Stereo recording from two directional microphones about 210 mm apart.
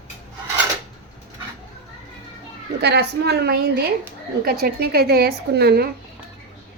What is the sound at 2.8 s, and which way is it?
A woman's voice, 50° right (ahead or behind).